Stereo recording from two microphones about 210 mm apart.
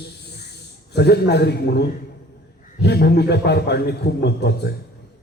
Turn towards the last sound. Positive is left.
turn(degrees=50)  # may be behind; listen again after turning